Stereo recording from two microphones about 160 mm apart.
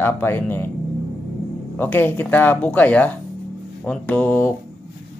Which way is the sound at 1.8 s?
10° left (ahead or behind).